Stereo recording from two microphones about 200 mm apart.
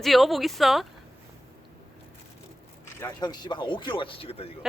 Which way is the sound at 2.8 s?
15° left (ahead or behind).